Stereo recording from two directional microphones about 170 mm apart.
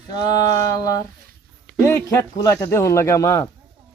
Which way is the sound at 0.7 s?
20° left (ahead or behind).